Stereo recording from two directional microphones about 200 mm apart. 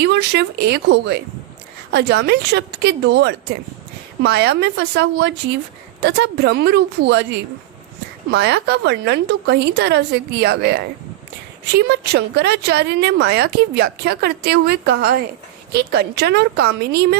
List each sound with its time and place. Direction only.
0.0 s a woman's voice: 55° right (ahead or behind)